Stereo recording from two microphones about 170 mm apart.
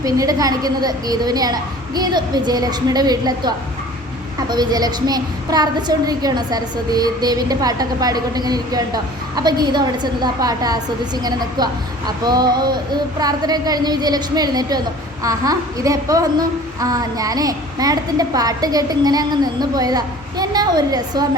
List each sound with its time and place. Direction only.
0.0 s a woman's voice: 20° right (ahead or behind)